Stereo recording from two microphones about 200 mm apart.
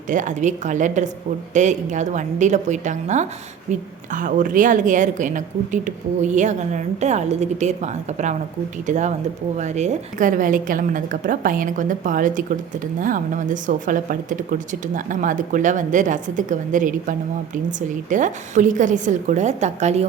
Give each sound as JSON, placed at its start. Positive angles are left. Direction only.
{"t": 0.1, "sound": "a woman's voice", "side_deg": -40}